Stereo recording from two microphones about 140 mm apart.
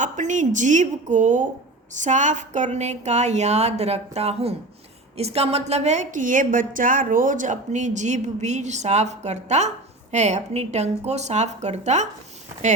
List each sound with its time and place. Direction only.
0.0 s a woman's voice: 60° right (ahead or behind)